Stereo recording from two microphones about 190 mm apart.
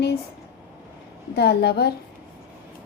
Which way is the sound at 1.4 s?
60° left (ahead or behind).